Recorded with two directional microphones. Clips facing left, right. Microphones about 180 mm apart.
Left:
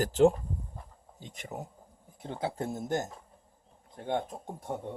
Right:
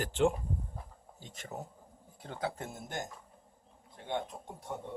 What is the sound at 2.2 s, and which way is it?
Speech, 25° left (ahead or behind).